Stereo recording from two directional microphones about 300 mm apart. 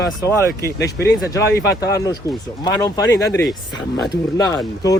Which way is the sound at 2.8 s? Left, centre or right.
Centre.